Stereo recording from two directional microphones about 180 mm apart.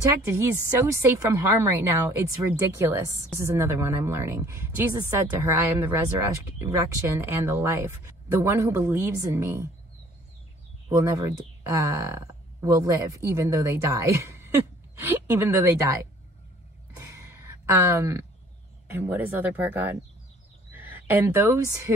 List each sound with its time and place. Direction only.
0.0 s speech: 15° right (ahead or behind)
10.9 s speech: 15° right (ahead or behind)
16.9 s a sound: 15° right (ahead or behind)
18.9 s a woman's voice: 10° right (ahead or behind)